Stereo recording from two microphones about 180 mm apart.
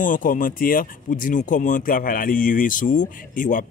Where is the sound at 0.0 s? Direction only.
50° left (ahead or behind).